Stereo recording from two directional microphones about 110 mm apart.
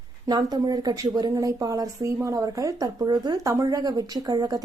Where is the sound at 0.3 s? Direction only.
35° right (ahead or behind).